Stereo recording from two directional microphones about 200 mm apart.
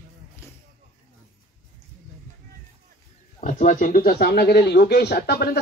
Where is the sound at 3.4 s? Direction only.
40° left (ahead or behind).